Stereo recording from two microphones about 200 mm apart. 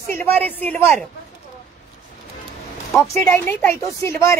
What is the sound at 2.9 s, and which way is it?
Speech, centre (ahead or behind).